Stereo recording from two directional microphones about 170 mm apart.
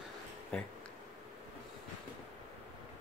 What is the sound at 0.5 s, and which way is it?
Speech, 5° left (ahead or behind).